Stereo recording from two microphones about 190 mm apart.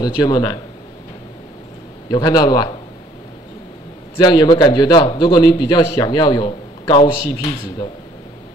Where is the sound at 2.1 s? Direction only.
20° left (ahead or behind).